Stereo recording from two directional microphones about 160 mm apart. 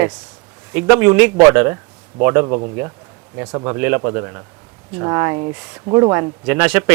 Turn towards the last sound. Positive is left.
turn(degrees=-10)  # may be behind; listen again after turning